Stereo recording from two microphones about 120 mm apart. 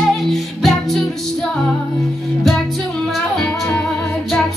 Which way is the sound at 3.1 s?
5° left (ahead or behind).